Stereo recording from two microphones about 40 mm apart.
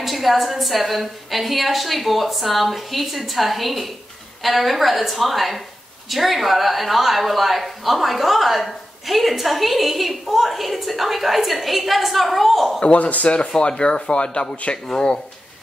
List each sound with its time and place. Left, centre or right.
0.0 s a woman's voice: centre
12.8 s speech: left